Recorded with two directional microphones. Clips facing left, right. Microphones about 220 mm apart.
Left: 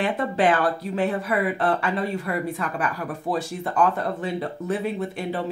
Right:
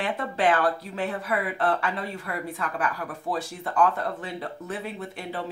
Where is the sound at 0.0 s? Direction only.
15° left (ahead or behind).